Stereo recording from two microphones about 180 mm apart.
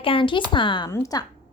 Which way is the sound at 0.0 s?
30° left (ahead or behind).